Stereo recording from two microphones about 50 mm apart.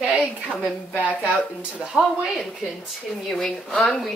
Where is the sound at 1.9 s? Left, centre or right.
Left.